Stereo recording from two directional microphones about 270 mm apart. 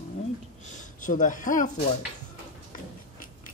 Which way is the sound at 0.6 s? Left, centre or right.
Left.